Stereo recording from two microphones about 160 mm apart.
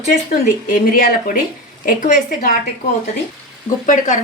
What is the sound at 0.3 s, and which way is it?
Speech, 65° left (ahead or behind).